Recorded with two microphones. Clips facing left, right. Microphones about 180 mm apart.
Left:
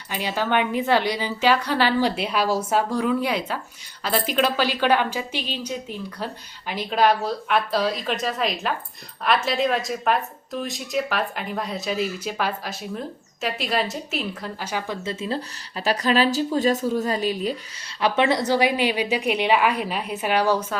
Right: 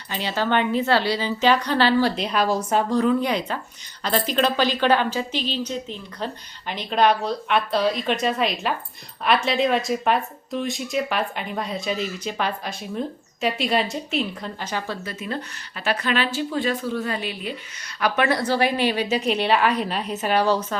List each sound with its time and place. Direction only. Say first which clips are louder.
0.1 s a woman's voice: right 1 dB; 10° left (ahead or behind)
15.0 s speech: left 3 dB; 30° left (ahead or behind)
18.0 s a woman's voice: left 1 dB; 25° left (ahead or behind)